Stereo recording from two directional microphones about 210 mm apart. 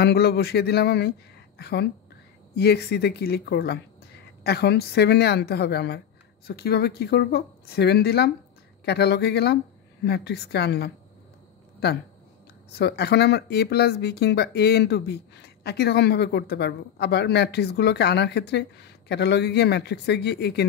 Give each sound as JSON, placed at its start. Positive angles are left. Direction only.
{"t": 0.0, "sound": "speech", "side_deg": 50}
{"t": 12.7, "sound": "speech", "side_deg": 50}